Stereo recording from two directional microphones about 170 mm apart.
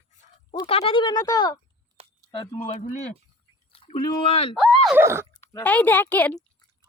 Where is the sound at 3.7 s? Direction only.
30° left (ahead or behind).